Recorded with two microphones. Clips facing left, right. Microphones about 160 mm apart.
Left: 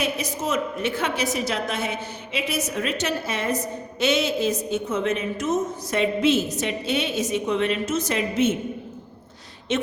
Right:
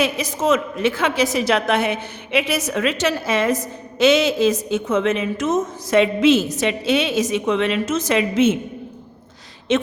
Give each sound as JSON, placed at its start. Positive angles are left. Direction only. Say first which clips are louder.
{"t": 0.0, "sound": "a woman's voice", "louder": "right 6 dB", "side_deg": -90}
{"t": 9.7, "sound": "a woman's voice", "louder": "right 6 dB", "side_deg": -90}